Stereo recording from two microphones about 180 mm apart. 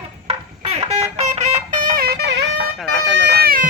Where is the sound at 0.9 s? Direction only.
35° right (ahead or behind); by 2.3 s 60° right (ahead or behind).